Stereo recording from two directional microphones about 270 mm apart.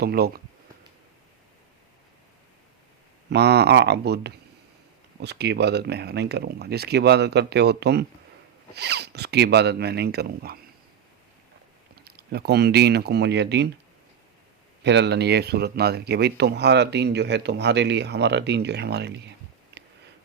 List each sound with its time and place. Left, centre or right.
0.0 s speech: right
3.2 s speech: right
11.9 s speech: right
14.8 s speech: right
19.7 s a sound: right